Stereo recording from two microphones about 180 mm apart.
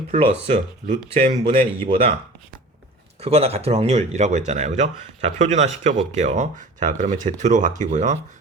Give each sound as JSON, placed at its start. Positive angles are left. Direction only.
{"t": 0.1, "sound": "speech", "side_deg": -30}
{"t": 3.2, "sound": "speech", "side_deg": -35}